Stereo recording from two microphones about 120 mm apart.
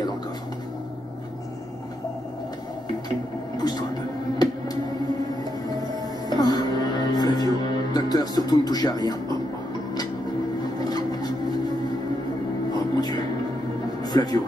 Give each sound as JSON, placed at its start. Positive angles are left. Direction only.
{"t": 3.5, "sound": "speech", "side_deg": 35}
{"t": 6.2, "sound": "music", "side_deg": 35}
{"t": 10.8, "sound": "filing", "side_deg": 35}
{"t": 12.7, "sound": "music", "side_deg": 35}
{"t": 14.0, "sound": "speech", "side_deg": 35}